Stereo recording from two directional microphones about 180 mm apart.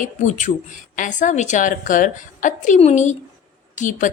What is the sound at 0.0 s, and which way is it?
A woman's voice, 40° left (ahead or behind).